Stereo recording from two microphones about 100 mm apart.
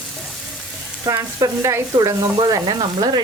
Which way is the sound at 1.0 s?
35° right (ahead or behind).